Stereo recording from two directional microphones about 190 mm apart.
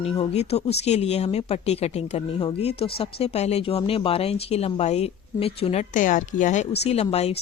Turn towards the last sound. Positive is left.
turn(degrees=30)  # may be behind; listen again after turning